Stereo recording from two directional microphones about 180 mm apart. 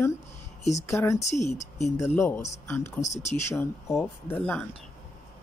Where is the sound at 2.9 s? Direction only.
40° left (ahead or behind).